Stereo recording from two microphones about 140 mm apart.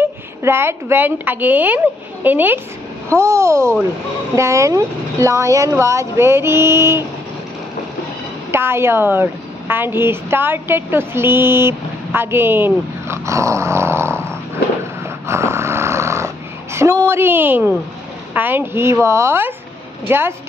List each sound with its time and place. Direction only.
0.0 s a woman's voice: 15° right (ahead or behind)
8.5 s a woman's voice: 15° right (ahead or behind)
15.2 s snoring: 20° right (ahead or behind)
16.7 s a woman's voice: 20° right (ahead or behind)